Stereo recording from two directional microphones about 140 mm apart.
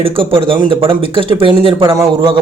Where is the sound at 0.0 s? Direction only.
40° right (ahead or behind).